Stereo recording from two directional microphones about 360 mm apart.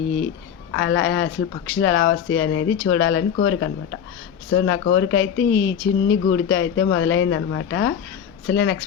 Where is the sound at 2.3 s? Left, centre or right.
Left.